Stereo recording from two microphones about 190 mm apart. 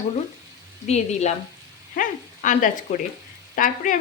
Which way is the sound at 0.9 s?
35° left (ahead or behind).